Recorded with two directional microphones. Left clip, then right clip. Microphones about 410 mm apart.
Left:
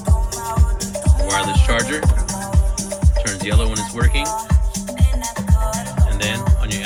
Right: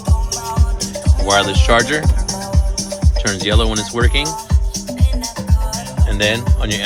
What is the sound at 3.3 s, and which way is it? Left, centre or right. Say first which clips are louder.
Music: right 9 dB; centre.